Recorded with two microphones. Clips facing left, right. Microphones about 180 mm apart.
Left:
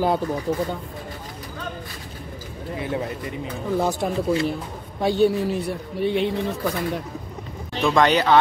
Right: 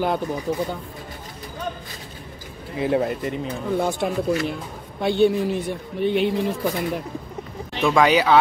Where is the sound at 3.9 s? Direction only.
35° left (ahead or behind).